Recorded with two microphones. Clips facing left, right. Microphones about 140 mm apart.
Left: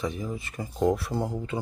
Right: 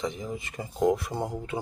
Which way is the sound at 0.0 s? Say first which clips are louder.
Left 1 dB; 20° right (ahead or behind).